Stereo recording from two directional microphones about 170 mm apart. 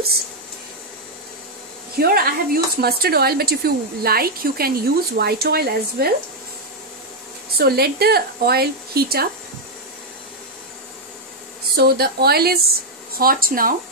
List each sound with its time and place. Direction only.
2.0 s speech: 65° right (ahead or behind)
7.5 s a woman's voice: 65° right (ahead or behind)
11.7 s a woman's voice: 70° right (ahead or behind)